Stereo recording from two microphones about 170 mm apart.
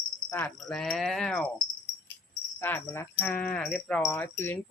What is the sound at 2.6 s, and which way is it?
Speech, 15° left (ahead or behind).